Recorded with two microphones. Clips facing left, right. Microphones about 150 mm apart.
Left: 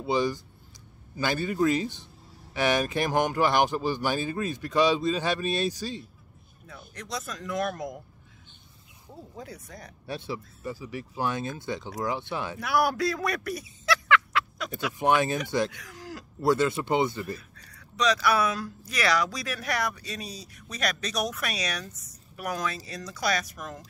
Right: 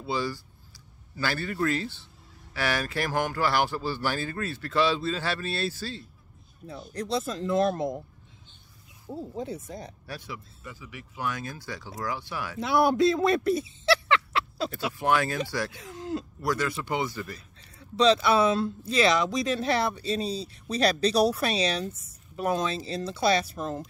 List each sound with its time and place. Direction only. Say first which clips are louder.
0.0 s speech: left 4 dB; 20° left (ahead or behind)
6.7 s speech: right 7 dB; 30° right (ahead or behind)
9.1 s speech: right 8 dB; 25° right (ahead or behind)
10.0 s speech: left 5 dB; 25° left (ahead or behind)
12.5 s speech: right 4 dB; 25° right (ahead or behind)
15.0 s speech: left 2 dB; 20° left (ahead or behind)
15.7 s speech: right 8 dB; 25° right (ahead or behind)
16.3 s speech: left 8 dB; 25° left (ahead or behind)
17.4 s speech: right 1 dB; 25° right (ahead or behind)